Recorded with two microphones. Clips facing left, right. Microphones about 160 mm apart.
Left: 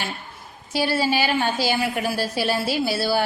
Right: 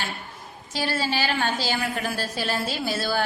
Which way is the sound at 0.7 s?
10° left (ahead or behind).